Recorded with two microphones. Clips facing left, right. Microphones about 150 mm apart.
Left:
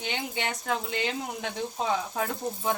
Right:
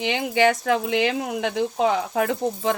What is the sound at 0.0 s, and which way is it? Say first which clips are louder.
Speech: right 12 dB; 90° right.